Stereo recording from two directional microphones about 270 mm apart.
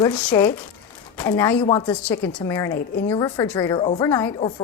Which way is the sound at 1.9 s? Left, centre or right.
Centre.